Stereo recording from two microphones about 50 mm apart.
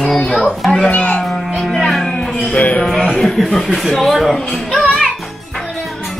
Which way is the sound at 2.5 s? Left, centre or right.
Left.